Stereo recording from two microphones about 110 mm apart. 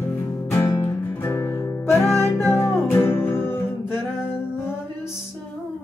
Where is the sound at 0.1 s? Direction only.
20° left (ahead or behind).